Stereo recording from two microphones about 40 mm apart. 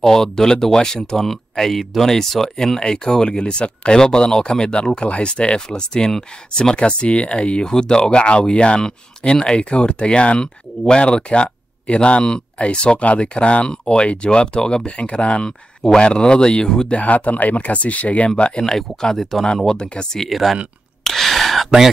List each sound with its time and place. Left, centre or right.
0.0 s a man's voice: centre
16.9 s speech: left
18.6 s a man's voice: centre
20.2 s speech: centre
21.0 s a sound: centre
21.6 s speech: centre